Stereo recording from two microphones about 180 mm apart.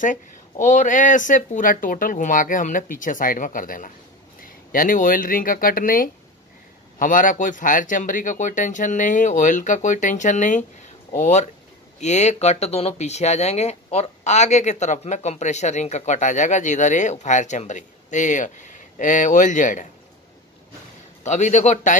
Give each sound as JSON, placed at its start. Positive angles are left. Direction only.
{"t": 0.0, "sound": "speech", "side_deg": 45}
{"t": 21.2, "sound": "speech", "side_deg": 40}